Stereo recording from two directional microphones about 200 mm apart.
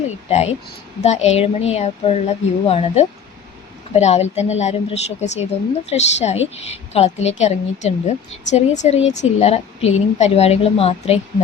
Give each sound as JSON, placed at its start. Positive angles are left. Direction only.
{"t": 0.3, "sound": "speech", "side_deg": 30}